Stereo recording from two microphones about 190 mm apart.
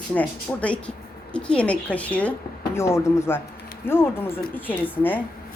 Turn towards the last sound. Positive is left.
turn(degrees=10)  # may be behind; listen again after turning